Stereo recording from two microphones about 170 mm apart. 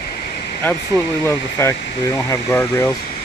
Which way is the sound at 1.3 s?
15° left (ahead or behind).